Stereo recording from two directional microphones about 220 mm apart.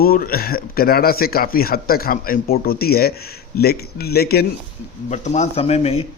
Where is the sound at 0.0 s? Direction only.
40° left (ahead or behind).